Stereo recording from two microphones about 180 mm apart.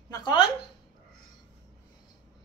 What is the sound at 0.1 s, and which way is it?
Speech, 25° left (ahead or behind).